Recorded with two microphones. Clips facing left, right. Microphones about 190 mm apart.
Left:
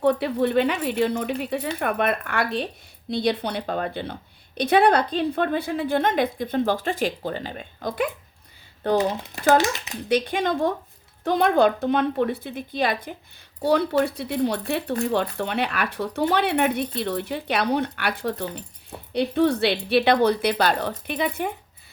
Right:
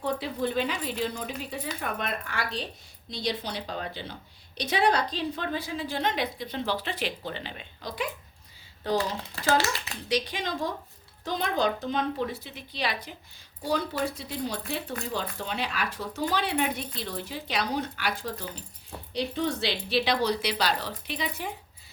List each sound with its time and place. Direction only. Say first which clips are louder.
0.0 s speech: left 8 dB; 65° left (ahead or behind)
9.5 s a child's voice: left 7 dB; 20° left (ahead or behind)
10.1 s speech: left 7 dB; 55° left (ahead or behind)
13.6 s speech: left 8 dB; 65° left (ahead or behind)